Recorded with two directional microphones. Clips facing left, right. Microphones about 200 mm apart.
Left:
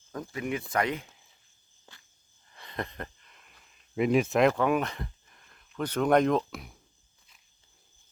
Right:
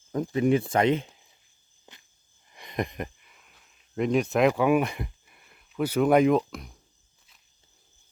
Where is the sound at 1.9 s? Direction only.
20° right (ahead or behind).